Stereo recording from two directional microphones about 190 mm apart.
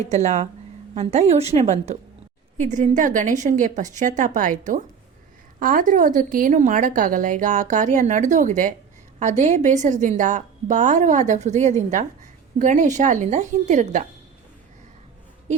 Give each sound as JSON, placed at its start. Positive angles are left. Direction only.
{"t": 0.0, "sound": "a woman's voice", "side_deg": -35}
{"t": 5.5, "sound": "a woman's voice", "side_deg": -45}